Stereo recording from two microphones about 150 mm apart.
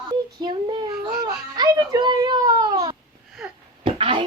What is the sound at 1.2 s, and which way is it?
Baby cry, 25° right (ahead or behind).